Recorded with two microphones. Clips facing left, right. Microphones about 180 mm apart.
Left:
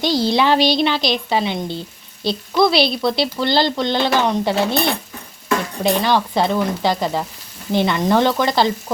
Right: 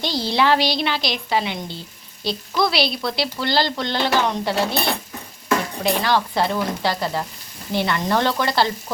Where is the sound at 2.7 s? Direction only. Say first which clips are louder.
Left 5 dB; 25° left (ahead or behind).